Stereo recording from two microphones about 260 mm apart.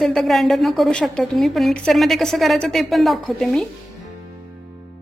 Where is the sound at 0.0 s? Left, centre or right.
Centre.